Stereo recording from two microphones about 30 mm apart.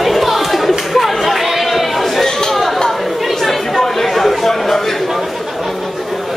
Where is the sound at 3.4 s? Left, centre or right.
Centre.